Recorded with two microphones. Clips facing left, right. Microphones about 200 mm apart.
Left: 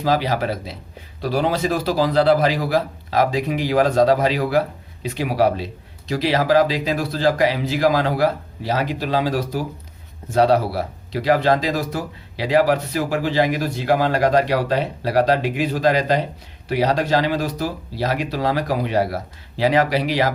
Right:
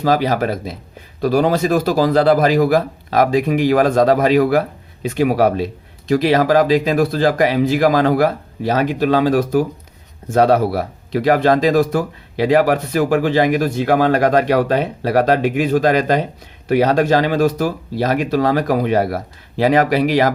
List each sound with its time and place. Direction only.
0.0 s speech: 50° right (ahead or behind)